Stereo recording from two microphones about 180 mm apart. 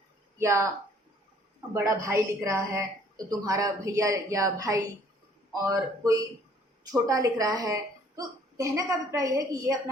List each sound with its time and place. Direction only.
0.3 s speech: 15° right (ahead or behind)
1.7 s a woman's voice: 15° right (ahead or behind)
6.9 s a woman's voice: 20° right (ahead or behind)